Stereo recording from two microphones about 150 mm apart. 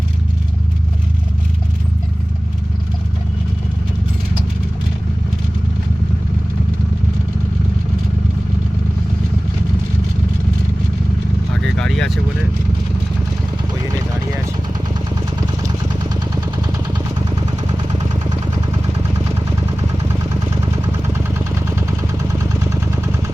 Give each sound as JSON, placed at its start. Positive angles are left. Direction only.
{"t": 11.6, "sound": "vehicle", "side_deg": 5}
{"t": 17.2, "sound": "vehicle", "side_deg": -30}
{"t": 21.1, "sound": "vehicle", "side_deg": -20}